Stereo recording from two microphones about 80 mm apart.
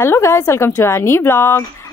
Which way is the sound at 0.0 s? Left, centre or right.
Left.